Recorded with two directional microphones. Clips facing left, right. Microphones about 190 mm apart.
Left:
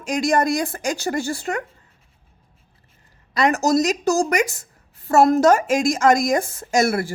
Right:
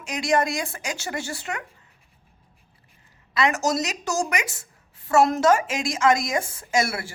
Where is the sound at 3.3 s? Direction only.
40° left (ahead or behind).